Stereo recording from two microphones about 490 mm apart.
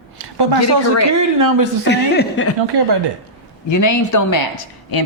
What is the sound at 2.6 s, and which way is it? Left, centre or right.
Speech, right.